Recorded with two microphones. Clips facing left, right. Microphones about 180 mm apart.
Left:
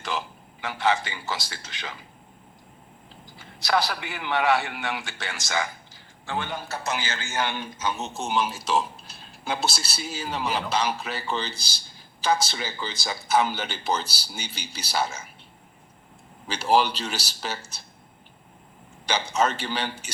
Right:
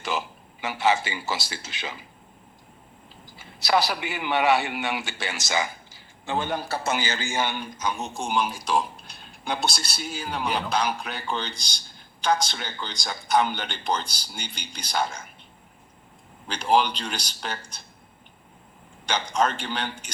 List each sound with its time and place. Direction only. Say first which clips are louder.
0.0 s a man's voice: right 2 dB; 5° right (ahead or behind)
3.3 s a man's voice: right 2 dB; 5° right (ahead or behind)
6.5 s a man's voice: right 4 dB; 35° right (ahead or behind)
7.0 s speech: right 2 dB; 15° right (ahead or behind); by 15.3 s 5° left (ahead or behind)
16.5 s speech: even; 5° left (ahead or behind)
19.0 s speech: even; 5° left (ahead or behind)